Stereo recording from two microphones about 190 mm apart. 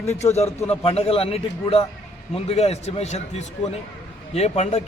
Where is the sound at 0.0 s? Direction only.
35° left (ahead or behind).